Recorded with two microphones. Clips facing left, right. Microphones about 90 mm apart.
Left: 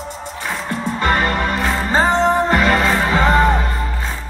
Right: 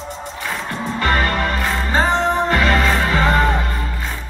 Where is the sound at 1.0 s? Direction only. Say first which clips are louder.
Left 1 dB; 25° left (ahead or behind).